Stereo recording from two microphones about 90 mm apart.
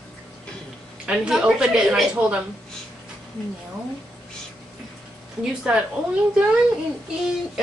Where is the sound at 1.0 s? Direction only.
10° right (ahead or behind).